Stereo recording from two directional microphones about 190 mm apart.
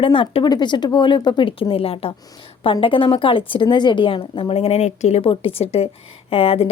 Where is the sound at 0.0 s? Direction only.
25° left (ahead or behind).